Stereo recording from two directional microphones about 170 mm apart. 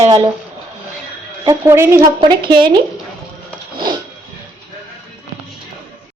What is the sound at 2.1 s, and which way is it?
Speech, 30° right (ahead or behind).